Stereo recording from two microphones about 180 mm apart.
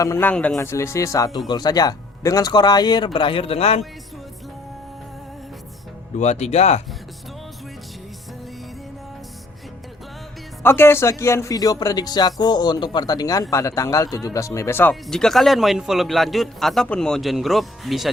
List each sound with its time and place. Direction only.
0.0 s speech: 15° left (ahead or behind); by 3.8 s 35° left (ahead or behind)
6.1 s speech: 40° left (ahead or behind)
10.6 s a man's voice: 15° left (ahead or behind)